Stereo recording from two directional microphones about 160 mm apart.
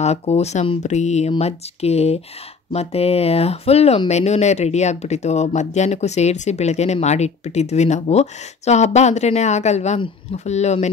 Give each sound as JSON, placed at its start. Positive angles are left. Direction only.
{"t": 0.0, "sound": "speech", "side_deg": 40}